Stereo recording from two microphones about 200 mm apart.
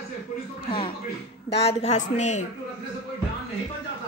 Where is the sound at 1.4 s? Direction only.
30° left (ahead or behind).